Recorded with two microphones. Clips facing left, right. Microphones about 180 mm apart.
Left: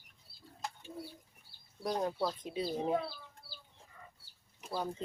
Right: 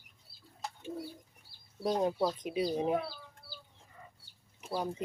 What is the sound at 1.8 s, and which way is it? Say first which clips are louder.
Speech: right 4 dB; 20° right (ahead or behind).